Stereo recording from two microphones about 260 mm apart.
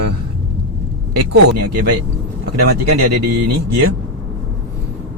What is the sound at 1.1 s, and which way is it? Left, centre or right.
Speech, right.